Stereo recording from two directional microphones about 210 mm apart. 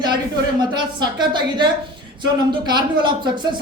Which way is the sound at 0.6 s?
20° right (ahead or behind).